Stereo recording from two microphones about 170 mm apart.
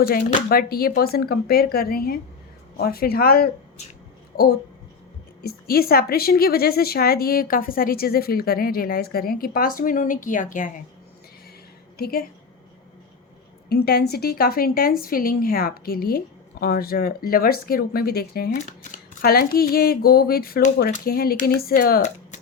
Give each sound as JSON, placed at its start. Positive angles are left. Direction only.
{"t": 0.4, "sound": "a woman's voice", "side_deg": 60}
{"t": 5.4, "sound": "a woman's voice", "side_deg": 65}
{"t": 11.9, "sound": "a woman's voice", "side_deg": 65}
{"t": 13.7, "sound": "a woman's voice", "side_deg": 70}
{"t": 18.5, "sound": "a woman's voice", "side_deg": 50}